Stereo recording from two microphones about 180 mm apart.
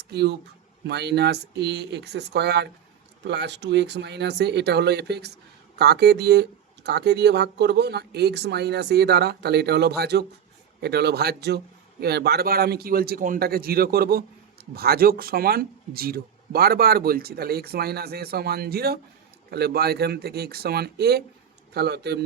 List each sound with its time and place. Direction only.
0.1 s speech: 65° right (ahead or behind)